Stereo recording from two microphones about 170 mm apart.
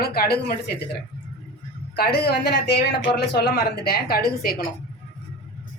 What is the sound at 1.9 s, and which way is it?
Speech, 70° left (ahead or behind).